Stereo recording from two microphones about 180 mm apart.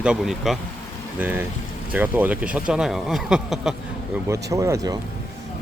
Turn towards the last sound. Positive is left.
turn(degrees=-20)  # may be behind; listen again after turning